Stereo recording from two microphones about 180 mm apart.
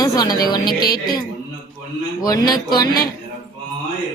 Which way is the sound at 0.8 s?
60° left (ahead or behind).